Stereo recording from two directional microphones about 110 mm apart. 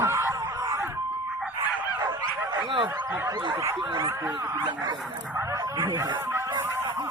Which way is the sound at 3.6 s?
25° right (ahead or behind).